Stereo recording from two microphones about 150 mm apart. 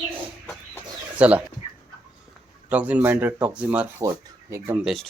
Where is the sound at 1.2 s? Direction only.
10° right (ahead or behind).